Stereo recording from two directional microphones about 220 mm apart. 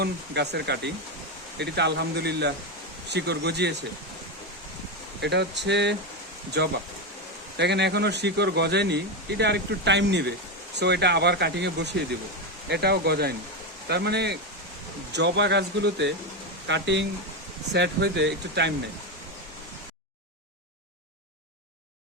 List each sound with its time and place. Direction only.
0.0 s speech: 50° right (ahead or behind)
5.2 s speech: 50° right (ahead or behind)